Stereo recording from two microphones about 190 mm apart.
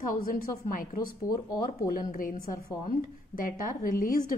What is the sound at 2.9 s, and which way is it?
A woman's voice, 45° left (ahead or behind).